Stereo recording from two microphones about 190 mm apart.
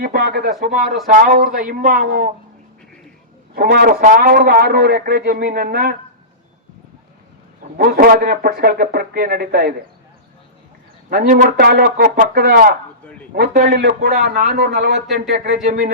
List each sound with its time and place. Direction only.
0.0 s a man's voice: 55° right (ahead or behind)
3.5 s a man's voice: 50° right (ahead or behind)
7.8 s a man's voice: 50° right (ahead or behind)
11.1 s a man's voice: 50° right (ahead or behind)
14.3 s a man's voice: 45° right (ahead or behind)
14.6 s speech: 60° right (ahead or behind)